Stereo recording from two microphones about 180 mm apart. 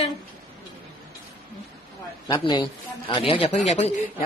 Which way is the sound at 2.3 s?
25° left (ahead or behind).